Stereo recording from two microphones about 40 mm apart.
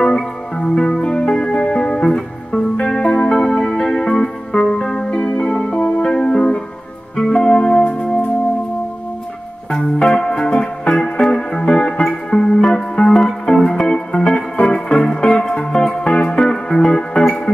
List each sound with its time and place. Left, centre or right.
0.0 s music: centre
10.2 s music: centre